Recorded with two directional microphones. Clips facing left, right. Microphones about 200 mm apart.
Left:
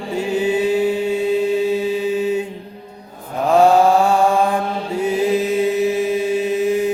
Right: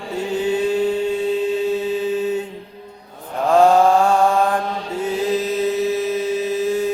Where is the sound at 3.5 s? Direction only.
10° left (ahead or behind).